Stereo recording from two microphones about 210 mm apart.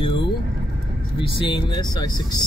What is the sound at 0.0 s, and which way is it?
Vehicle, 25° left (ahead or behind).